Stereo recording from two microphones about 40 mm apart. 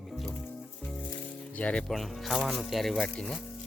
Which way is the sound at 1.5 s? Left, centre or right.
Left.